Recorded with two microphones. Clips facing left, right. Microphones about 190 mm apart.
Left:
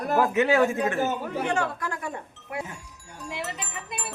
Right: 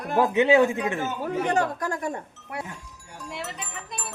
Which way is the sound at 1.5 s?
40° right (ahead or behind).